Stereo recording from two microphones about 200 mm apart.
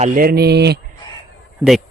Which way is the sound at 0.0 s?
45° right (ahead or behind).